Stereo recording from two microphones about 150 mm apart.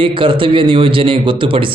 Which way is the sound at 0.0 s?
35° right (ahead or behind).